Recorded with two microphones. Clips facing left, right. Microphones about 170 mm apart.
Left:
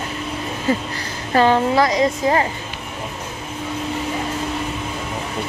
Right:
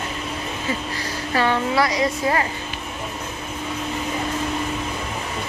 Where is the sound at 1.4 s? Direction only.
25° left (ahead or behind).